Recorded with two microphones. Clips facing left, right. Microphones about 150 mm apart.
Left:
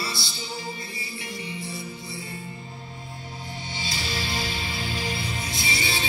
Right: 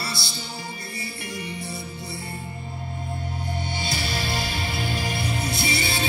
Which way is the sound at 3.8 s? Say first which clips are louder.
Right 1 dB; 60° right (ahead or behind).